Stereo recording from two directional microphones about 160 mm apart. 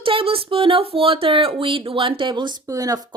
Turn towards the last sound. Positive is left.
turn(degrees=-25)  # may be behind; listen again after turning